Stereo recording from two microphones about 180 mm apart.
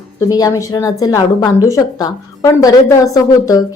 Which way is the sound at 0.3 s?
20° left (ahead or behind).